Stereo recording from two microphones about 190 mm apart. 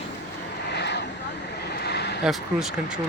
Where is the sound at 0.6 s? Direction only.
65° left (ahead or behind).